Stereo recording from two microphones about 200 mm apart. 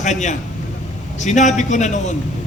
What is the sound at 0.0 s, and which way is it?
A man's voice, 35° left (ahead or behind).